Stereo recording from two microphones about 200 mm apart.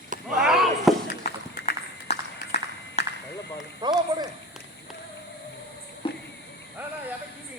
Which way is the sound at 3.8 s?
20° right (ahead or behind).